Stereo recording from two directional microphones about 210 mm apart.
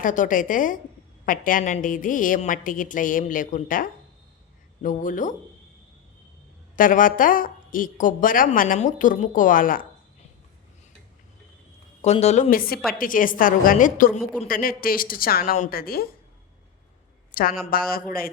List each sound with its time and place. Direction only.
0.0 s a woman's voice: 40° left (ahead or behind)
6.7 s a woman's voice: 40° left (ahead or behind)
12.0 s a woman's voice: 30° left (ahead or behind)
17.7 s a woman's voice: 45° left (ahead or behind)